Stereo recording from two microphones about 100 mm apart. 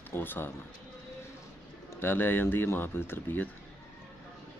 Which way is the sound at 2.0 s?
20° left (ahead or behind).